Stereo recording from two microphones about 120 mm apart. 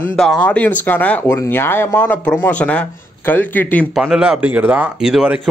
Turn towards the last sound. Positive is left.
turn(degrees=-5)  # may be behind; listen again after turning